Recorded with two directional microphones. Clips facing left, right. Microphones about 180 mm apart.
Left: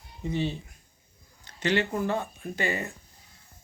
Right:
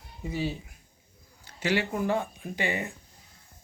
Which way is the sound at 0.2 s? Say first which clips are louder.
Left 2 dB; 5° right (ahead or behind).